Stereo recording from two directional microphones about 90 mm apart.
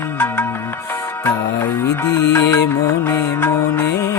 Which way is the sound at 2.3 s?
30° left (ahead or behind).